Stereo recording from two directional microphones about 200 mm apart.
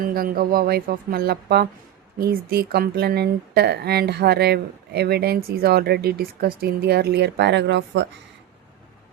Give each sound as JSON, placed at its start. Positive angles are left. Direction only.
{"t": 0.0, "sound": "speech", "side_deg": -45}